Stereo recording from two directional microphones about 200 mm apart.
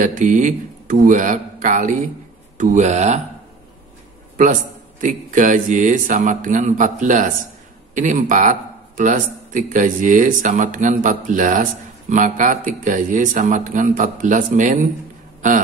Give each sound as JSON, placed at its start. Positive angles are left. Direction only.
{"t": 0.0, "sound": "speech", "side_deg": -40}
{"t": 5.0, "sound": "speech", "side_deg": -40}